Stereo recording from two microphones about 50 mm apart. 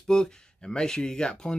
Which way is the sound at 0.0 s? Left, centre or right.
Centre.